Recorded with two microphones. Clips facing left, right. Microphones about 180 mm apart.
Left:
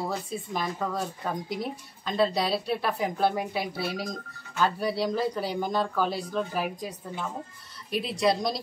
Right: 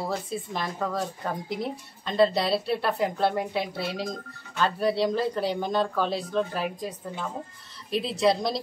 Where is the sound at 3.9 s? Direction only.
25° right (ahead or behind).